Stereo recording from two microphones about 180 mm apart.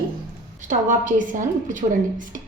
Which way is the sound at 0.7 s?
45° right (ahead or behind).